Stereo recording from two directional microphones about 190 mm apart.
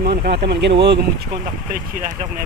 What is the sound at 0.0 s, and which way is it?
Speech, 60° right (ahead or behind).